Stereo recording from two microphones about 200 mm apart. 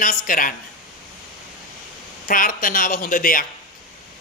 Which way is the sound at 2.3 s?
45° left (ahead or behind).